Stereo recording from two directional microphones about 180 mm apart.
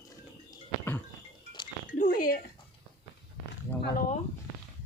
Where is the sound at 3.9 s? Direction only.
50° left (ahead or behind).